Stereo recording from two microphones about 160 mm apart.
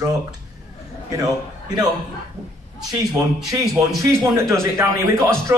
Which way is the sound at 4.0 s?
15° right (ahead or behind).